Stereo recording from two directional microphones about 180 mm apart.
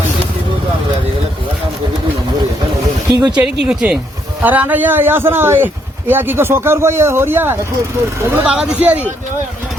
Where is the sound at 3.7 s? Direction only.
5° right (ahead or behind).